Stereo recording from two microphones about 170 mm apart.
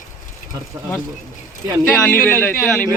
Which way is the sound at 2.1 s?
10° left (ahead or behind).